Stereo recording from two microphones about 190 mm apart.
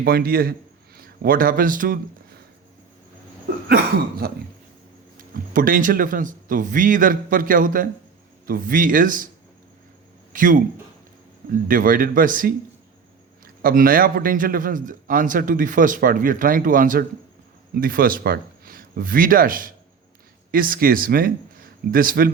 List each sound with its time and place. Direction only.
0.0 s a man's voice: 50° right (ahead or behind)
4.2 s a man's voice: 55° right (ahead or behind)
10.3 s speech: 45° right (ahead or behind)
11.7 s a man's voice: 45° right (ahead or behind)